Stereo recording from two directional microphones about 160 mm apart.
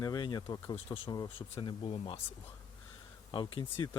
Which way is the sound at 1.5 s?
40° left (ahead or behind).